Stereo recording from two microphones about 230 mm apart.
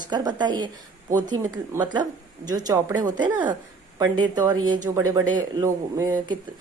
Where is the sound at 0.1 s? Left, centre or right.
Centre.